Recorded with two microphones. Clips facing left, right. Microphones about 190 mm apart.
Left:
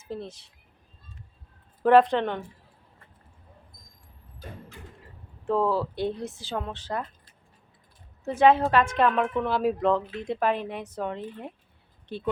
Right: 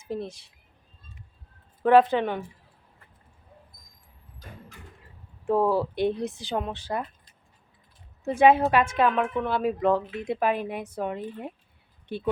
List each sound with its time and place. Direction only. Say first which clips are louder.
0.0 s a woman's voice: right 3 dB; 15° right (ahead or behind)
1.8 s speech: even; centre (ahead or behind)
5.5 s a woman's voice: right 2 dB; 15° right (ahead or behind)